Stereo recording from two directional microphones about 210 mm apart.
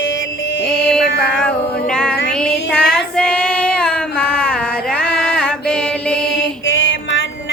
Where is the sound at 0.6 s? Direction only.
Centre (ahead or behind).